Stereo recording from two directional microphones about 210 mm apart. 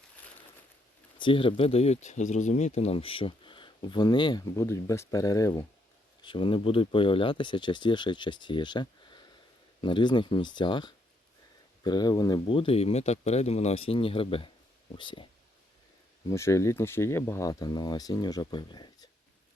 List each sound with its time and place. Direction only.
1.2 s speech: 25° left (ahead or behind)
16.3 s speech: 15° left (ahead or behind)